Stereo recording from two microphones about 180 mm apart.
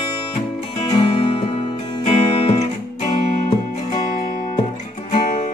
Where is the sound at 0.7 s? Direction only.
30° left (ahead or behind).